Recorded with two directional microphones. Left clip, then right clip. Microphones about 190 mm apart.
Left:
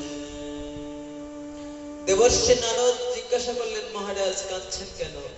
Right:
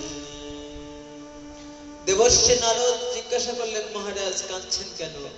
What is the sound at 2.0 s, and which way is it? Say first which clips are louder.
A man's voice: right 1 dB; 25° right (ahead or behind).